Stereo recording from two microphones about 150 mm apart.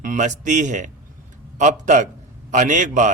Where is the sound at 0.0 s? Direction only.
60° right (ahead or behind).